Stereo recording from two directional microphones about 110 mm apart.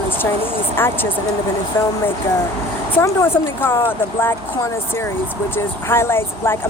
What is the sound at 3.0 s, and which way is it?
Speech, 25° left (ahead or behind).